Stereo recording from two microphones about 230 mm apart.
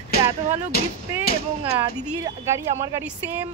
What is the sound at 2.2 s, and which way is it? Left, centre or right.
Speech, centre.